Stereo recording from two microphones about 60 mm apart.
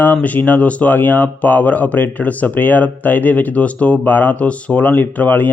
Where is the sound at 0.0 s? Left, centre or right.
Left.